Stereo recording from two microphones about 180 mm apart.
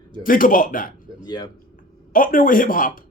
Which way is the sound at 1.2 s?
20° left (ahead or behind).